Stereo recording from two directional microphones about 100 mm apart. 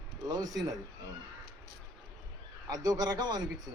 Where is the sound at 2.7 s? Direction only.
35° right (ahead or behind).